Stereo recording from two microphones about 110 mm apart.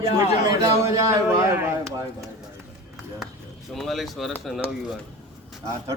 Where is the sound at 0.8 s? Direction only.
30° right (ahead or behind).